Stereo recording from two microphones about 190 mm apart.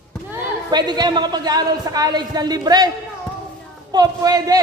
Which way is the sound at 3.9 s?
20° right (ahead or behind).